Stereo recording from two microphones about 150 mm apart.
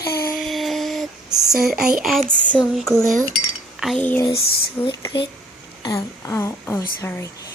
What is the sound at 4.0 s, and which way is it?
Speech, 10° left (ahead or behind).